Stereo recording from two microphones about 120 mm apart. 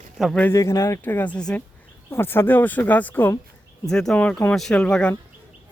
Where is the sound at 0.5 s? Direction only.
25° left (ahead or behind); by 1.6 s 10° left (ahead or behind).